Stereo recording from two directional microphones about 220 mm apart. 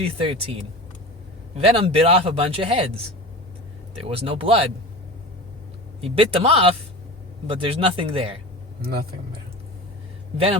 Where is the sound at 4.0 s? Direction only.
25° right (ahead or behind).